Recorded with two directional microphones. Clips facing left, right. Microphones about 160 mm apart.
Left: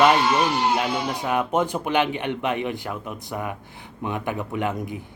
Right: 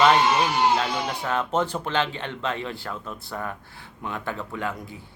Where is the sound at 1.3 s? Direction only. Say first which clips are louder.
Left 3 dB; 15° left (ahead or behind).